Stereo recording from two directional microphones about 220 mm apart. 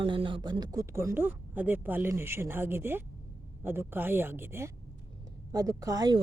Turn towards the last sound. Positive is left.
turn(degrees=-15)  # may be behind; listen again after turning